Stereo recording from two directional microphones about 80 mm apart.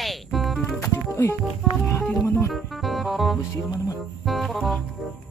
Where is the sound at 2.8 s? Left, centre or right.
Centre.